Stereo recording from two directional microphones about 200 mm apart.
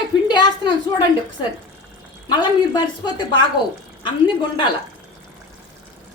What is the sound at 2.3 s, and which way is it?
Speech, 20° left (ahead or behind).